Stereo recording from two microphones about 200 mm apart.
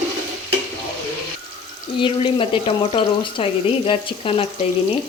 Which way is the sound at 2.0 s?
25° left (ahead or behind).